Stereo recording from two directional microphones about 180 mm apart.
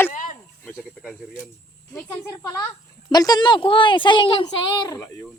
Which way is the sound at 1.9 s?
15° left (ahead or behind).